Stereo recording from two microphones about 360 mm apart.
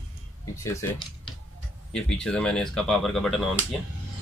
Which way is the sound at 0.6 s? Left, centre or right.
Centre.